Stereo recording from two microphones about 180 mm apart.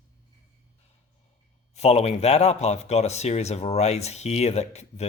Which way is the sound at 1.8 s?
35° left (ahead or behind).